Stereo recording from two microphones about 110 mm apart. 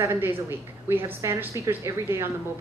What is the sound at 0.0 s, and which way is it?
A woman's voice, 20° right (ahead or behind).